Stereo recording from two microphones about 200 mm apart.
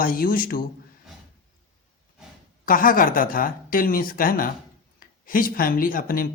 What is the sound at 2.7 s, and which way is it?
Speech, 45° left (ahead or behind).